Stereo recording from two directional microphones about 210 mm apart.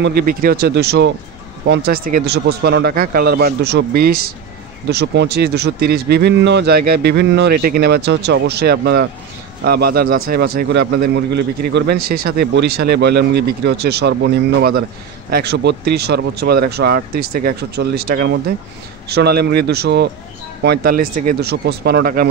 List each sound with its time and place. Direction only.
0.0 s a man's voice: 45° right (ahead or behind)